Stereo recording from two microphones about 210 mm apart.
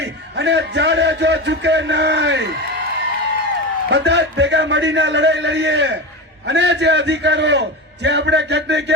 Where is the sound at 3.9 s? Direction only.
55° right (ahead or behind).